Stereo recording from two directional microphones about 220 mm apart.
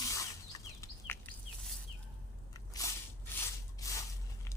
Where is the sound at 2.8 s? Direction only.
15° left (ahead or behind).